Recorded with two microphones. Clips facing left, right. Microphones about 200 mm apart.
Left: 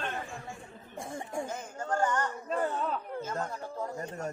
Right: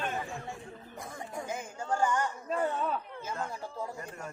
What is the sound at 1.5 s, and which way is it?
Speech, 10° right (ahead or behind).